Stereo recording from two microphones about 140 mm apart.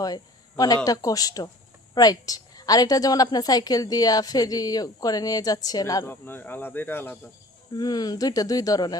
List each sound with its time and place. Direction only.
0.0 s a woman's voice: 25° left (ahead or behind)
7.7 s a woman's voice: 30° left (ahead or behind)